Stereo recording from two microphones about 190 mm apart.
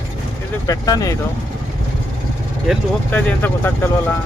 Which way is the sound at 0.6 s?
20° left (ahead or behind).